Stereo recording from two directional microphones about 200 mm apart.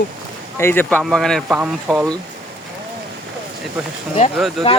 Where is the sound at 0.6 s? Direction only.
10° left (ahead or behind); by 2.0 s 5° right (ahead or behind).